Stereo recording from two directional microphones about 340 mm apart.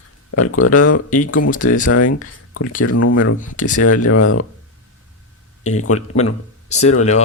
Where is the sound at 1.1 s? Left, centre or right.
Left.